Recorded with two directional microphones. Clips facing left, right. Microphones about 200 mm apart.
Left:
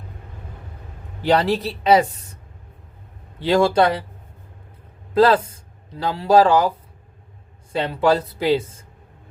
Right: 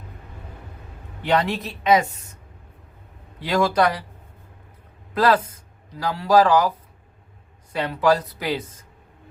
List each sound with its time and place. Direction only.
1.2 s speech: 35° left (ahead or behind)
3.4 s speech: 30° left (ahead or behind)
5.1 s speech: 30° left (ahead or behind)